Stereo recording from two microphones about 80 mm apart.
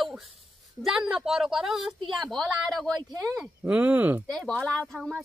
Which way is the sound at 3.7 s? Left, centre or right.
Centre.